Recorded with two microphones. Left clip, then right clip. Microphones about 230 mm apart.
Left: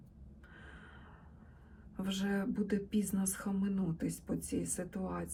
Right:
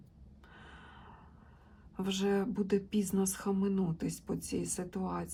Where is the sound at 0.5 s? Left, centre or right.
Centre.